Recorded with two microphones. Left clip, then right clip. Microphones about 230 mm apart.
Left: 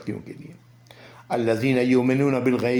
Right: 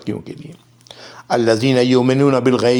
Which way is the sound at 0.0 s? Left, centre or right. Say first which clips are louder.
Right 7 dB; right.